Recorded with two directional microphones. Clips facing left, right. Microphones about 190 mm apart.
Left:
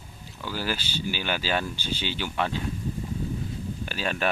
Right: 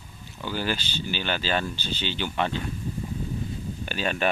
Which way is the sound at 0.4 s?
5° left (ahead or behind).